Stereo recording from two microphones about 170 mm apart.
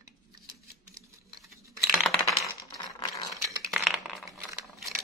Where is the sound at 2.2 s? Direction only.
15° right (ahead or behind).